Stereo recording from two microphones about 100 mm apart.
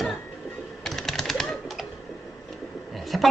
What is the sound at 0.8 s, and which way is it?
Typing, centre (ahead or behind).